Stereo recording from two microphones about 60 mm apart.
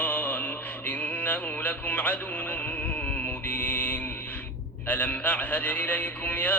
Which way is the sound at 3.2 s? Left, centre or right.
Left.